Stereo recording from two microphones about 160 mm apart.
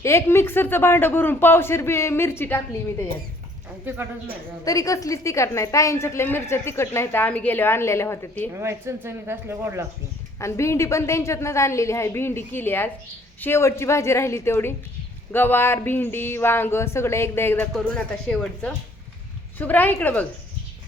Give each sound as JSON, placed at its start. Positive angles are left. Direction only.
{"t": 0.0, "sound": "a woman's voice", "side_deg": 15}
{"t": 4.6, "sound": "a woman's voice", "side_deg": 20}
{"t": 8.5, "sound": "speech", "side_deg": -15}
{"t": 10.4, "sound": "a woman's voice", "side_deg": 15}